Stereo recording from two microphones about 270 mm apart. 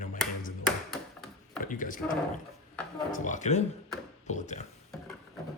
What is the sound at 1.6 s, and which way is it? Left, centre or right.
Speech, left.